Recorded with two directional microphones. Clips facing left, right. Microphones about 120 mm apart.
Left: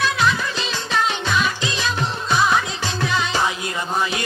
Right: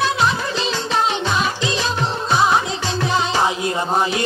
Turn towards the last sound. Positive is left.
turn(degrees=-30)  # may be behind; listen again after turning